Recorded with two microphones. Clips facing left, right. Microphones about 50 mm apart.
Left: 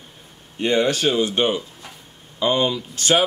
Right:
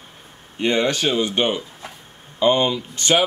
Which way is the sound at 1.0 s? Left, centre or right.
Centre.